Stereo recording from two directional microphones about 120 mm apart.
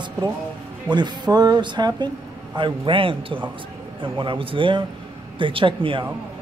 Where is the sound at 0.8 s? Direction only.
35° right (ahead or behind).